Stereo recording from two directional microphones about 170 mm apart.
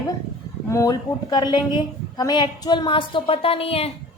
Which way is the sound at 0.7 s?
20° left (ahead or behind).